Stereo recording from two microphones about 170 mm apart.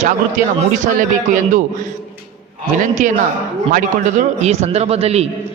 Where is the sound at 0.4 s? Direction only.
50° right (ahead or behind).